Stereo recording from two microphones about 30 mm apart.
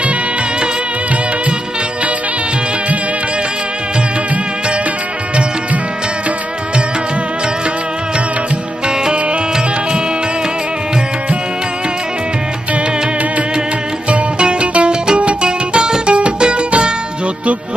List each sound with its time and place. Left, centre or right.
14.1 s music: right
15.0 s music: right
16.0 s music: right